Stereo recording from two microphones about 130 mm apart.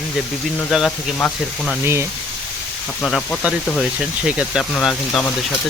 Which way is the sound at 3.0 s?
10° left (ahead or behind).